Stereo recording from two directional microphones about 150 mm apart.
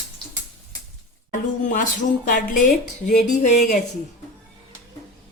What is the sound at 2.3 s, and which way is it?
Speech, 60° left (ahead or behind).